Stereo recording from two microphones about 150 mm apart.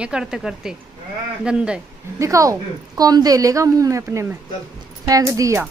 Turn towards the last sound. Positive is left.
turn(degrees=-20)  # may be behind; listen again after turning